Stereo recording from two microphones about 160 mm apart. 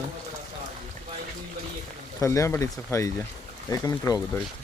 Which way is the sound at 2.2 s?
20° left (ahead or behind).